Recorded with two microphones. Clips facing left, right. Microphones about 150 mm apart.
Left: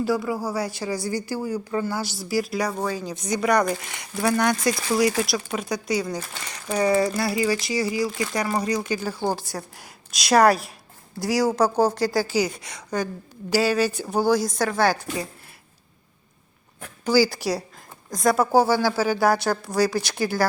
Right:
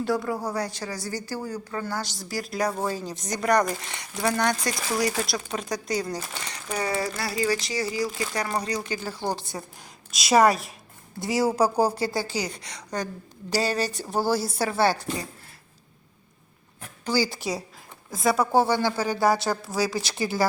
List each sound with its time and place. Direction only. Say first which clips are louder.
0.0 s speech: left 2 dB; 5° left (ahead or behind)
6.8 s speech: left 9 dB; 15° left (ahead or behind); by 12.1 s 5° right (ahead or behind)
12.2 s speech: left 6 dB; 10° left (ahead or behind)
17.1 s speech: left 6 dB; 5° left (ahead or behind)